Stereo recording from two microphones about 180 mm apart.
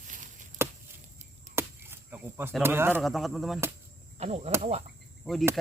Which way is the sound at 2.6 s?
10° right (ahead or behind).